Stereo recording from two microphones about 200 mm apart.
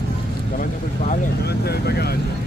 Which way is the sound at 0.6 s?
50° left (ahead or behind).